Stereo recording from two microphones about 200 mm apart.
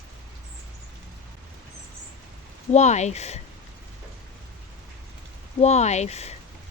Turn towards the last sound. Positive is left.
turn(degrees=35)  # may be behind; listen again after turning